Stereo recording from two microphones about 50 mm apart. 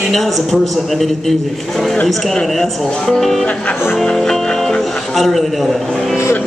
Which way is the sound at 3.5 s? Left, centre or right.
Left.